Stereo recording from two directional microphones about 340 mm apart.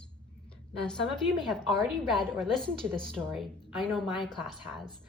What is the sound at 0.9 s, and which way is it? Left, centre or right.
A woman's voice, centre.